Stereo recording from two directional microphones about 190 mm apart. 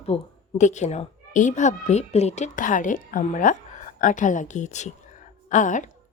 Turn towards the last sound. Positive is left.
turn(degrees=40)  # may be behind; listen again after turning